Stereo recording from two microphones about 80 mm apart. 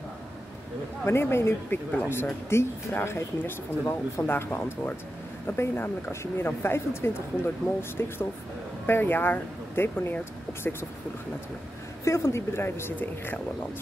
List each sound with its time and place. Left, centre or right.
1.0 s speech: left
12.0 s speech: left